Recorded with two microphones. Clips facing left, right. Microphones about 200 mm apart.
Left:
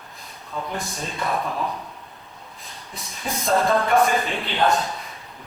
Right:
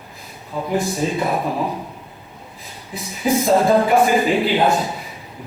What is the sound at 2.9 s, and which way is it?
Speech, 5° right (ahead or behind).